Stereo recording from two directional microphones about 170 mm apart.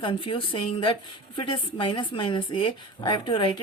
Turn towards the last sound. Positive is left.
turn(degrees=30)  # may be behind; listen again after turning